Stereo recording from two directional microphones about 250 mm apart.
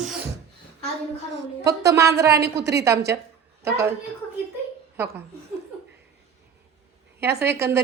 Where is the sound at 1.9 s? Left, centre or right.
Centre.